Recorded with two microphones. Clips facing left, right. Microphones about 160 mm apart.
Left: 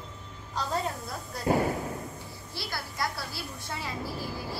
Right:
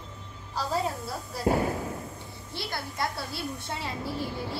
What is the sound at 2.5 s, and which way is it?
A woman's voice, 25° right (ahead or behind).